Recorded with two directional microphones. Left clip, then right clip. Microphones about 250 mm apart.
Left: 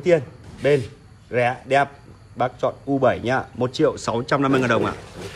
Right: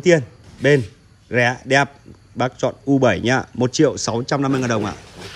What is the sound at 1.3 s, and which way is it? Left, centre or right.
Speech, right.